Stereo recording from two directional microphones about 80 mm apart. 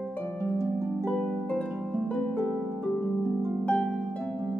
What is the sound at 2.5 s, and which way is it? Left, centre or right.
Harp, right.